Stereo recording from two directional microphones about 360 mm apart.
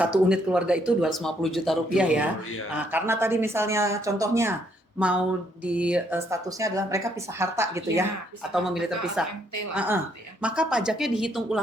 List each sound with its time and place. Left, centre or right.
0.0 s speech: centre